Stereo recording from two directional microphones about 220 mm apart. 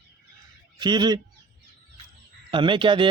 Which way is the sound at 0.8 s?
20° right (ahead or behind).